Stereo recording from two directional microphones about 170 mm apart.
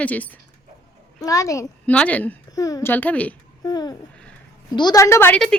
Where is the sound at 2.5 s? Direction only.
20° left (ahead or behind).